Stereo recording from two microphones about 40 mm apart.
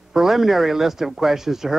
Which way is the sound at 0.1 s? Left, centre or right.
Centre.